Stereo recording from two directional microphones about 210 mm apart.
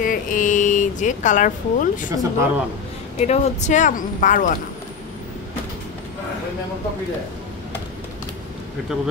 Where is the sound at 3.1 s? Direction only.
30° left (ahead or behind).